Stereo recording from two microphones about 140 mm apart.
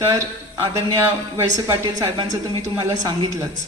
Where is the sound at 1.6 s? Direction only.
25° right (ahead or behind).